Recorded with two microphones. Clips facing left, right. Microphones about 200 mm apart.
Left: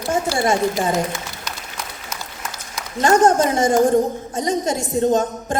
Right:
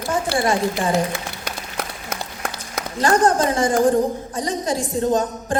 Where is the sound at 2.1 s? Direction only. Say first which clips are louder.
Right 7 dB; 55° right (ahead or behind).